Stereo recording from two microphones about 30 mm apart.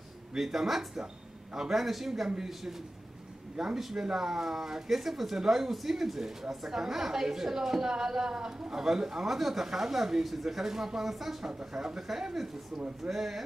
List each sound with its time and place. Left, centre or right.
0.4 s speech: centre
1.8 s speech: centre
11.7 s speech: centre
13.1 s speech: centre